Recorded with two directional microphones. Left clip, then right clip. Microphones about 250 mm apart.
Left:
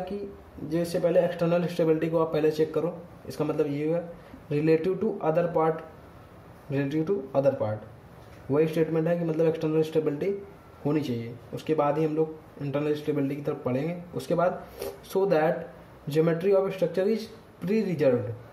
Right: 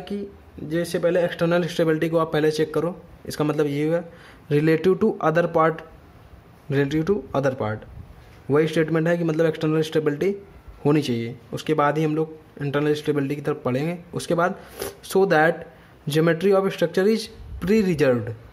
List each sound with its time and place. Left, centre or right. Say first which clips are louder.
0.7 s speech: right 4 dB; right
6.7 s speech: right 6 dB; right